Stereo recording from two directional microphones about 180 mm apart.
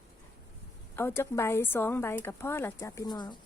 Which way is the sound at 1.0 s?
10° left (ahead or behind).